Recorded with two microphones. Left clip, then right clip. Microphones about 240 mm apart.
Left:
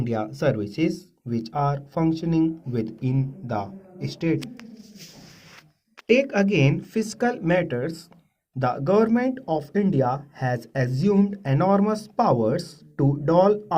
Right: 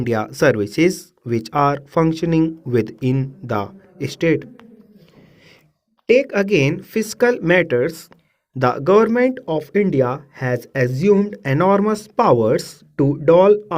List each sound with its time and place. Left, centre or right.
0.0 s speech: right
6.1 s speech: right